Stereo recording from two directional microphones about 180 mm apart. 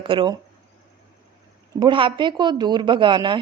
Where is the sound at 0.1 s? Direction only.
25° right (ahead or behind).